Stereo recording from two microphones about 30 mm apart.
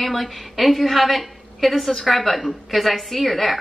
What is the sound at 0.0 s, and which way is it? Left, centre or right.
A woman's voice, centre.